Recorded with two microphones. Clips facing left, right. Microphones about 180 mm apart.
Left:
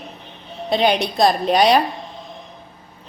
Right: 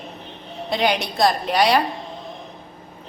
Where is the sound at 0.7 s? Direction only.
20° left (ahead or behind).